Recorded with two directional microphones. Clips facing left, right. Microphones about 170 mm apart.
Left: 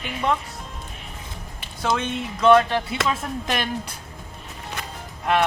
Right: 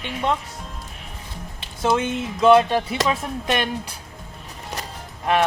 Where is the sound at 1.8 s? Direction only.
20° right (ahead or behind).